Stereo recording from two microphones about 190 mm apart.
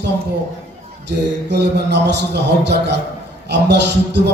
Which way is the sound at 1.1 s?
65° right (ahead or behind).